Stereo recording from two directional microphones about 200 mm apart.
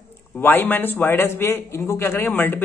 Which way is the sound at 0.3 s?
10° left (ahead or behind).